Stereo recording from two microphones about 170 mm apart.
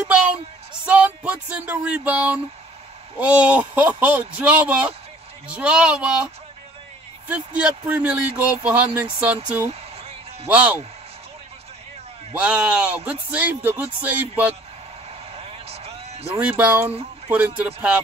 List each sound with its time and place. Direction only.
0.8 s speech: 10° right (ahead or behind)
9.7 s a sound: 35° right (ahead or behind)
10.5 s speech: 10° right (ahead or behind)
12.4 s speech: 5° right (ahead or behind)
15.3 s a sound: 35° right (ahead or behind)
16.3 s speech: 5° right (ahead or behind)